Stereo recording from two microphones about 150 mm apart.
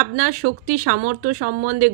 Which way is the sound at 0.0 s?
60° right (ahead or behind).